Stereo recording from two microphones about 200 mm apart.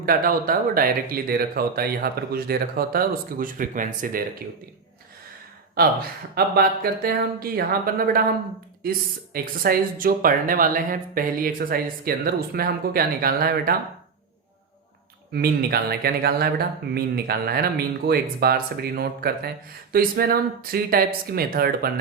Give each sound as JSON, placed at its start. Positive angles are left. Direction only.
{"t": 0.0, "sound": "speech", "side_deg": -45}
{"t": 5.7, "sound": "speech", "side_deg": -50}
{"t": 15.3, "sound": "speech", "side_deg": -50}